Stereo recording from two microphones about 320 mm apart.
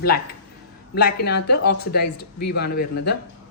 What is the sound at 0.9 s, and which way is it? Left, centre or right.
A woman's voice, left.